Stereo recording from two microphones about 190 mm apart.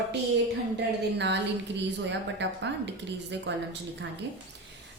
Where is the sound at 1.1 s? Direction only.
65° right (ahead or behind).